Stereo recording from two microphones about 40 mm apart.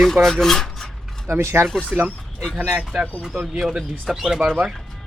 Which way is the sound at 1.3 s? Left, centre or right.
Right.